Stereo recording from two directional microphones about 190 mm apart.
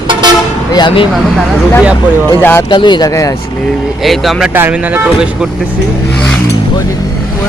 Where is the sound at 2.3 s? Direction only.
10° left (ahead or behind).